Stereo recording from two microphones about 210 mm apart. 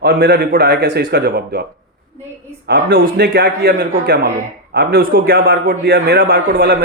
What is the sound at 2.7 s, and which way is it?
A man's voice, 45° right (ahead or behind).